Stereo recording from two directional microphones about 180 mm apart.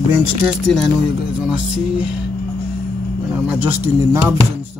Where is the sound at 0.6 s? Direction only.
Centre (ahead or behind).